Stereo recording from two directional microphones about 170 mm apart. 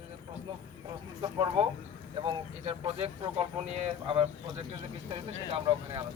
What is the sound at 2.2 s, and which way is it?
Speech, 35° right (ahead or behind).